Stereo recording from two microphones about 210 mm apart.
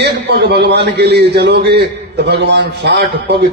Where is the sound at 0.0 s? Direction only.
50° right (ahead or behind).